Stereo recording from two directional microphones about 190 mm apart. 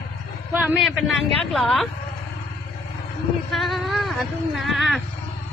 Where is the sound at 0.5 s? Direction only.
10° right (ahead or behind).